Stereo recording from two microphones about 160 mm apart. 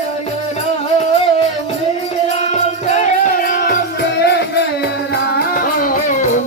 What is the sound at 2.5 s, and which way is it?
Music, 50° left (ahead or behind).